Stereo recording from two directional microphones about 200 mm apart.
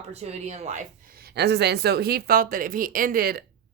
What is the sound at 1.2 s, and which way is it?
Speech, 55° right (ahead or behind).